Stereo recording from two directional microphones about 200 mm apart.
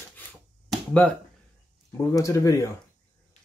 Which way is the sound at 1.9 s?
15° left (ahead or behind).